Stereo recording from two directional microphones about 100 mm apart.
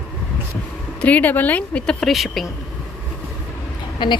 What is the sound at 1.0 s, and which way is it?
Speech, 15° left (ahead or behind).